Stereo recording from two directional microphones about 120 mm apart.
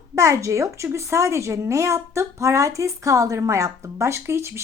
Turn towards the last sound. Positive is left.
turn(degrees=-20)  # may be behind; listen again after turning